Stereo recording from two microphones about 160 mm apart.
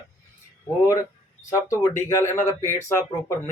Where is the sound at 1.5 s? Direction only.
20° left (ahead or behind).